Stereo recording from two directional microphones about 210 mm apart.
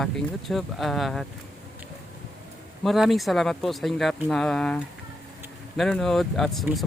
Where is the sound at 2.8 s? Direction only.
Centre (ahead or behind).